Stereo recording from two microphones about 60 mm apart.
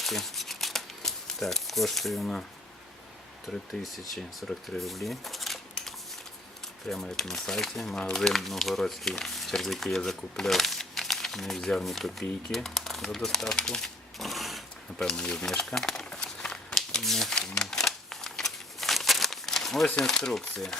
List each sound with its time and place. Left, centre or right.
0.0 s shuffling cards: centre
3.5 s speech: centre
15.0 s a sound: centre